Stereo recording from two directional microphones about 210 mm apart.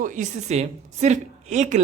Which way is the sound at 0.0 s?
35° right (ahead or behind).